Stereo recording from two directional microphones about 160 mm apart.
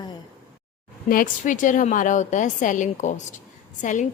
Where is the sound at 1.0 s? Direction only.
60° left (ahead or behind).